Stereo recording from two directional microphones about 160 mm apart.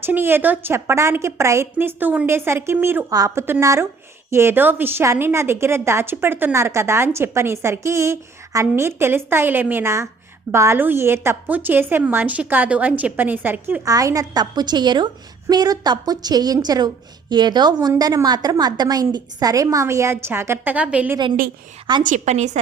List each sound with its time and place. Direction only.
0.0 s a woman's voice: 15° right (ahead or behind)
22.0 s a woman's voice: 50° right (ahead or behind)